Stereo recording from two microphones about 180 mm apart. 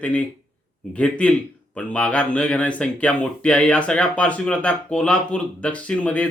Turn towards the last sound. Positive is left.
turn(degrees=5)  # may be behind; listen again after turning